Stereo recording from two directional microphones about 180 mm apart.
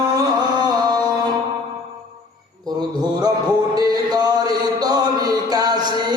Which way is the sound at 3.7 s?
20° right (ahead or behind).